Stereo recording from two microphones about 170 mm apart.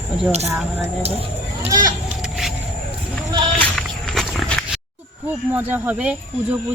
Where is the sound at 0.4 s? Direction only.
15° right (ahead or behind).